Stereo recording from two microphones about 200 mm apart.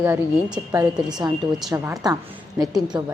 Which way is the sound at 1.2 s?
20° right (ahead or behind).